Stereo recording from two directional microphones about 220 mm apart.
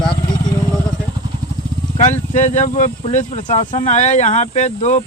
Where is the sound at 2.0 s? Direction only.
35° left (ahead or behind).